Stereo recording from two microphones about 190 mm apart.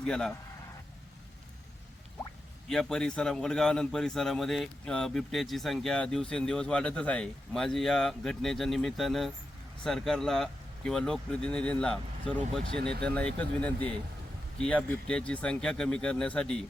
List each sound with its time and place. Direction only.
0.0 s a man's voice: 5° left (ahead or behind)
2.6 s a man's voice: 5° left (ahead or behind)